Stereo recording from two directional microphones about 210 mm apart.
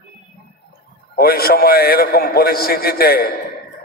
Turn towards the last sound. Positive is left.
turn(degrees=45)  # may be behind; listen again after turning